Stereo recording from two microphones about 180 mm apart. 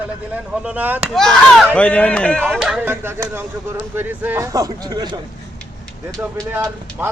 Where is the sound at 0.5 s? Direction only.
5° right (ahead or behind).